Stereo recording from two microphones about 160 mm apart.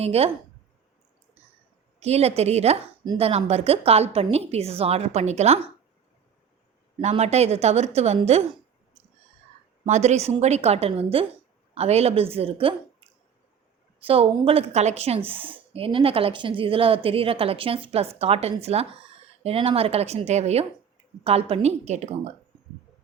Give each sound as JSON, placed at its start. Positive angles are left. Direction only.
{"t": 0.0, "sound": "a woman's voice", "side_deg": -40}
{"t": 2.0, "sound": "a woman's voice", "side_deg": -40}
{"t": 7.0, "sound": "a woman's voice", "side_deg": -45}
{"t": 9.8, "sound": "a woman's voice", "side_deg": -45}
{"t": 14.1, "sound": "a woman's voice", "side_deg": -35}